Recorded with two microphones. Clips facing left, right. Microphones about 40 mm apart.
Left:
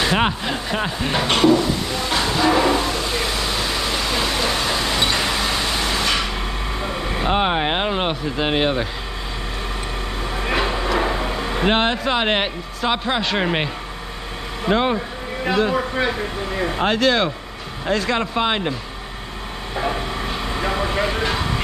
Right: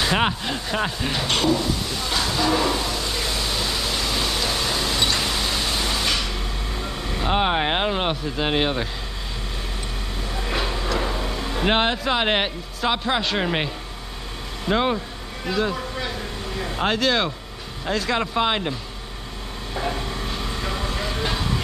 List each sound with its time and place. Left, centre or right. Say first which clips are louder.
0.0 s speech: left 2 dB; centre
1.1 s a sound: left 7 dB; left
7.2 s speech: left 1 dB; centre
10.4 s vehicle: left 5 dB; left
11.0 s a sound: left 5 dB; left
11.6 s a man's voice: left 2 dB; centre
14.7 s speech: left 2 dB; centre
15.7 s speech: left 8 dB; left
16.8 s a man's voice: left 3 dB; centre
20.2 s vehicle: left 5 dB; left